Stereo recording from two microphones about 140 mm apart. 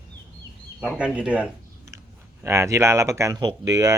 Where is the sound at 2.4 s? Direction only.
20° right (ahead or behind).